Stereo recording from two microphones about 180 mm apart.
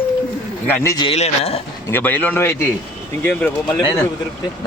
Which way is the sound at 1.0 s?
35° left (ahead or behind).